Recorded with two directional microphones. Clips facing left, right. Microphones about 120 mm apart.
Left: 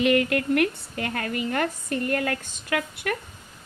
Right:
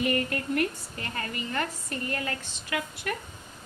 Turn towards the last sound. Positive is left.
turn(degrees=55)  # may be behind; listen again after turning